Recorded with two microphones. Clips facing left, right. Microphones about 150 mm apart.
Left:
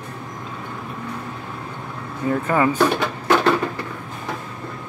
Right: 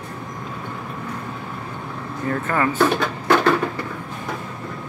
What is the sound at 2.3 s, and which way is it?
Speech, 15° left (ahead or behind).